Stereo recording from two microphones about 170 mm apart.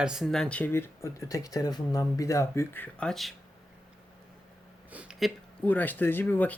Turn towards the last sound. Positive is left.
turn(degrees=10)  # may be behind; listen again after turning